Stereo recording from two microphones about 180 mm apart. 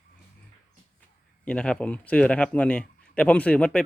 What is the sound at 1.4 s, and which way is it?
A man's voice, 5° left (ahead or behind).